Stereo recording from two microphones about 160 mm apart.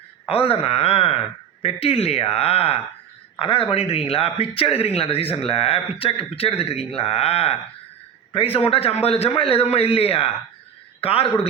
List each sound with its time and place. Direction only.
0.3 s a man's voice: 35° left (ahead or behind)